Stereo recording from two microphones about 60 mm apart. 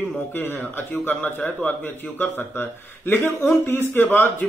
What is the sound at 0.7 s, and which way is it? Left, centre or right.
Speech, left.